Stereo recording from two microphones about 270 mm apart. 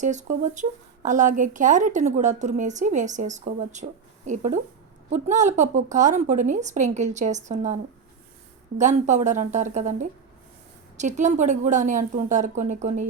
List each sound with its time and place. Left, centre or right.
0.0 s speech: right
8.8 s speech: right